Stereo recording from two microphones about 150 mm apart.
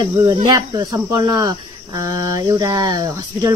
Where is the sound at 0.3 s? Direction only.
25° right (ahead or behind).